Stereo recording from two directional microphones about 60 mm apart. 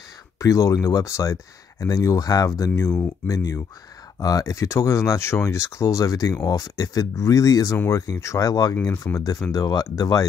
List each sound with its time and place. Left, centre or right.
0.4 s speech: left
2.7 s speech: left
4.2 s speech: left
5.3 s speech: left
7.9 s speech: left
8.4 s speech: left
8.8 s speech: left